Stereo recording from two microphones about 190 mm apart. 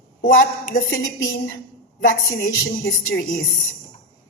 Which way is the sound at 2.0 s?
50° left (ahead or behind).